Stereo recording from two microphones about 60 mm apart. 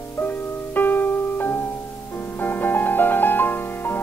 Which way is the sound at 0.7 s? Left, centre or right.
Left.